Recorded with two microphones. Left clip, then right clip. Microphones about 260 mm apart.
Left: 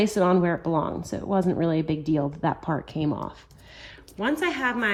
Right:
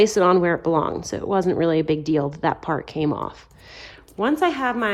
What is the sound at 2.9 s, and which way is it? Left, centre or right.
A woman's voice, right.